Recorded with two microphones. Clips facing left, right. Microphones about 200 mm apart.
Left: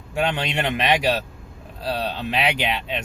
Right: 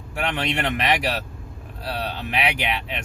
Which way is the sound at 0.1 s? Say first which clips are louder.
Left 2 dB; 25° left (ahead or behind).